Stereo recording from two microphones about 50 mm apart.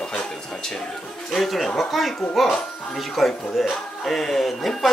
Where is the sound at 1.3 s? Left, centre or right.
Centre.